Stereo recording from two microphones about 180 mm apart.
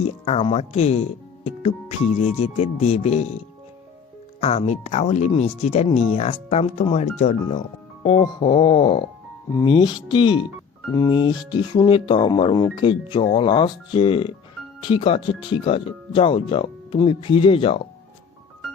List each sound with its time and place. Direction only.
0.0 s speech: 35° left (ahead or behind)
2.1 s speech: 35° left (ahead or behind)
4.4 s speech: 35° left (ahead or behind)
8.0 s speech: 30° left (ahead or behind)